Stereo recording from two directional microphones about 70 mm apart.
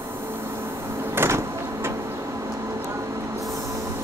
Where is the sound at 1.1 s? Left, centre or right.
Right.